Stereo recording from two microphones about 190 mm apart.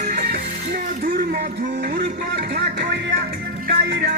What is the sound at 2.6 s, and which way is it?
Music, 65° right (ahead or behind).